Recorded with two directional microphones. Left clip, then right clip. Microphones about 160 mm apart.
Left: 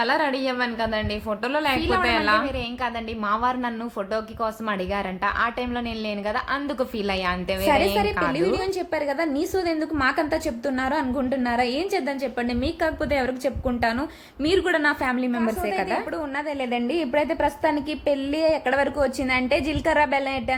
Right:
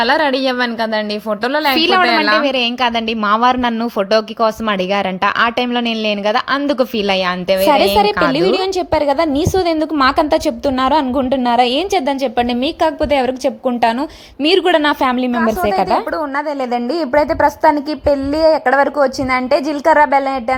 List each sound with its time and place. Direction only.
0.0 s a woman's voice: 50° right (ahead or behind)
2.0 s speech: 40° right (ahead or behind)
2.4 s a woman's voice: 60° right (ahead or behind); by 15.4 s 40° right (ahead or behind)
17.2 s speech: 10° right (ahead or behind)
17.6 s speech: 30° right (ahead or behind)
18.1 s speech: 5° right (ahead or behind)
18.6 s speech: 20° right (ahead or behind)
18.9 s a woman's voice: 5° right (ahead or behind)
20.0 s speech: 25° right (ahead or behind)